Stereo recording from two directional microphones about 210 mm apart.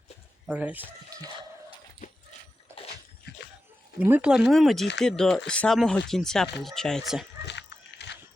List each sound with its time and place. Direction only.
0.4 s speech: 5° right (ahead or behind)
2.7 s bathtub: 15° right (ahead or behind)
3.3 s a sound: 50° left (ahead or behind)
4.0 s speech: 5° right (ahead or behind)
7.4 s horse: 55° left (ahead or behind)